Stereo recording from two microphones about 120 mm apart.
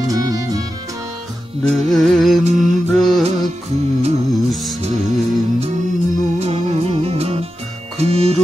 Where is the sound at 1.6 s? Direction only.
60° right (ahead or behind).